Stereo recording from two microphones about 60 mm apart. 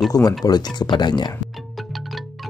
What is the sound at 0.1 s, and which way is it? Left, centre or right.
Speech, left.